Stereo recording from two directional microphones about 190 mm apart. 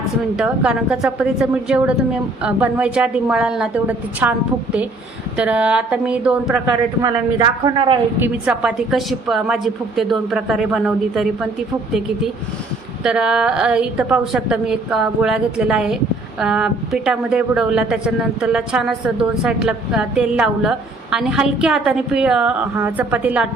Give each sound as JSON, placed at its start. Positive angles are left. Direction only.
{"t": 0.3, "sound": "a woman's voice", "side_deg": -5}
{"t": 7.0, "sound": "speech", "side_deg": -20}
{"t": 8.2, "sound": "a woman's voice", "side_deg": -5}
{"t": 13.0, "sound": "a woman's voice", "side_deg": -5}